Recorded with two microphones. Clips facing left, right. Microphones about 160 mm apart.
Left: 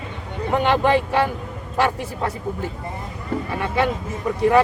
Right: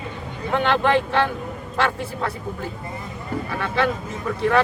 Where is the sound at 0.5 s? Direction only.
10° left (ahead or behind).